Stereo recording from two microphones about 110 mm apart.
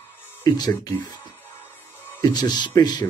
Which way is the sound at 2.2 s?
40° left (ahead or behind).